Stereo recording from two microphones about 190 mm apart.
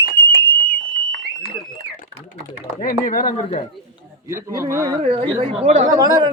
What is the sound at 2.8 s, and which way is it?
Speech, 45° left (ahead or behind).